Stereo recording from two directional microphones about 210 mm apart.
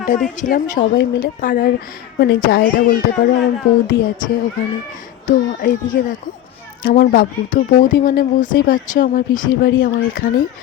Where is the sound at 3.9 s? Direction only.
60° left (ahead or behind).